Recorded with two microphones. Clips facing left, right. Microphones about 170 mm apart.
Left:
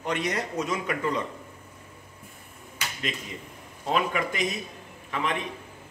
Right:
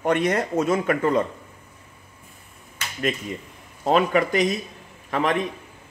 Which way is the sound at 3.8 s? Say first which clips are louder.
Right 7 dB; 45° right (ahead or behind).